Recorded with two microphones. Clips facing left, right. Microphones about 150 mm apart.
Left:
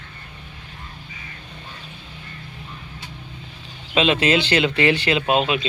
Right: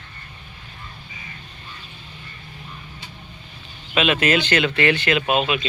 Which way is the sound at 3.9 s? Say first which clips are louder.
Left 1 dB; 30° left (ahead or behind).